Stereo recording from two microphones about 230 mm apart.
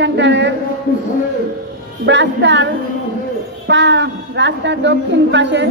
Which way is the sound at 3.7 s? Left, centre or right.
Right.